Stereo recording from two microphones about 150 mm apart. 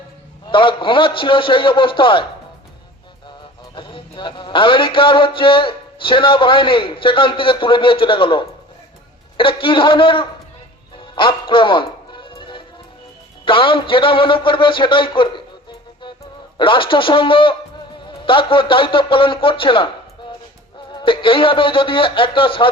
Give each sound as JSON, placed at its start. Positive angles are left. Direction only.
{"t": 0.4, "sound": "speech", "side_deg": 35}
{"t": 3.8, "sound": "speech", "side_deg": 35}
{"t": 10.9, "sound": "music", "side_deg": 35}
{"t": 13.4, "sound": "speech", "side_deg": 35}
{"t": 16.6, "sound": "speech", "side_deg": 35}
{"t": 20.9, "sound": "speech", "side_deg": 35}